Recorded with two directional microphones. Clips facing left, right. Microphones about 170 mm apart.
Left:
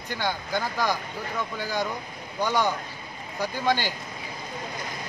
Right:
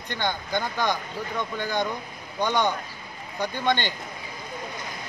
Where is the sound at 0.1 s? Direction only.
10° left (ahead or behind).